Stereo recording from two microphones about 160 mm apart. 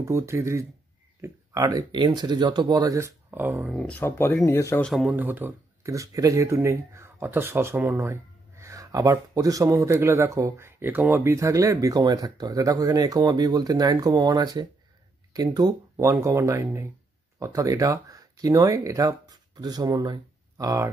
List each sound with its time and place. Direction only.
0.0 s speech: 15° right (ahead or behind)
3.7 s speech: 10° left (ahead or behind)
4.8 s speech: 5° right (ahead or behind); by 20.9 s 20° right (ahead or behind)